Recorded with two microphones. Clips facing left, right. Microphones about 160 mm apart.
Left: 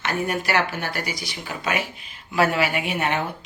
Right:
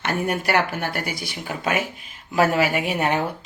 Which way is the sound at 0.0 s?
55° right (ahead or behind).